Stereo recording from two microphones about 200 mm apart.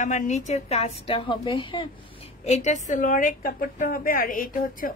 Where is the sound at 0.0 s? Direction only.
40° left (ahead or behind).